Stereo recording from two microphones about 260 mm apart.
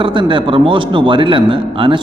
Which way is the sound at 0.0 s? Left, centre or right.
Centre.